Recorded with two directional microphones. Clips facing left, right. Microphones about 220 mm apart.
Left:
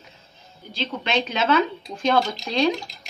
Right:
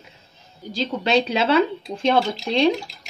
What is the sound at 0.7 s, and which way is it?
Speech, 40° right (ahead or behind).